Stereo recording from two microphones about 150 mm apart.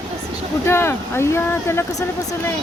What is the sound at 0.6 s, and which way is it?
Speech, 15° left (ahead or behind).